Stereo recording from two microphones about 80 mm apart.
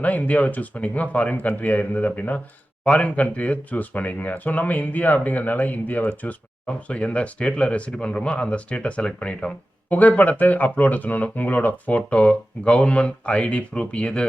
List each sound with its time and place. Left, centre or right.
0.0 s speech: centre